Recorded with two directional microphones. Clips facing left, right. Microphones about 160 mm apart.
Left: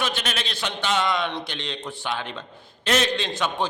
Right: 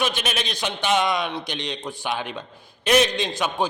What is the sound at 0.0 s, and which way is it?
A man's voice, 15° right (ahead or behind).